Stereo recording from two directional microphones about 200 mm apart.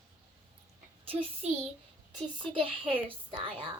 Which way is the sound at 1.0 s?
30° right (ahead or behind).